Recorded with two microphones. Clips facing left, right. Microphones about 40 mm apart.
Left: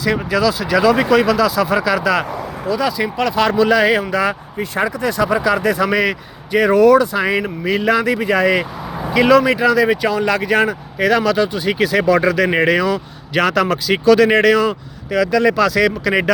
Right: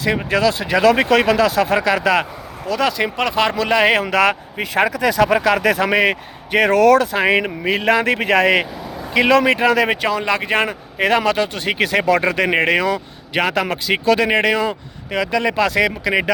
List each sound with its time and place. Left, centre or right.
0.3 s speech: right
0.8 s speech: right
2.6 s speech: right
5.8 s speech: right
6.5 s speech: right
7.8 s speech: right
9.1 s speech: right
13.3 s speech: right
16.0 s speech: centre